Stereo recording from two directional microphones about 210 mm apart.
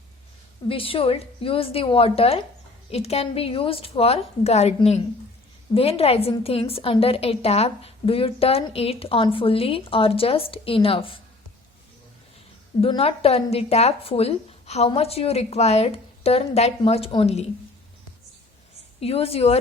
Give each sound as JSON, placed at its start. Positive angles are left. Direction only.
{"t": 0.7, "sound": "a woman's voice", "side_deg": 25}
{"t": 12.8, "sound": "a woman's voice", "side_deg": 25}
{"t": 18.9, "sound": "a woman's voice", "side_deg": 30}